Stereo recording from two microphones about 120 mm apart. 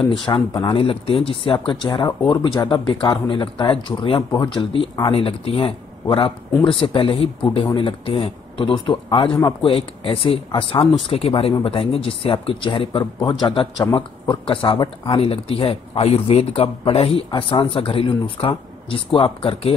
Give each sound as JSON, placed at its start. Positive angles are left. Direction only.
{"t": 0.1, "sound": "a man's voice", "side_deg": 40}
{"t": 13.5, "sound": "speech", "side_deg": 45}